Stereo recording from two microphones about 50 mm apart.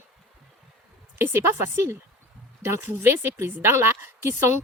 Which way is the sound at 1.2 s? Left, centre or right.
Right.